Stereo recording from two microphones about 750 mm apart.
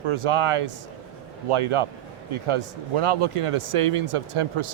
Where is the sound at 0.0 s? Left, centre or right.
Right.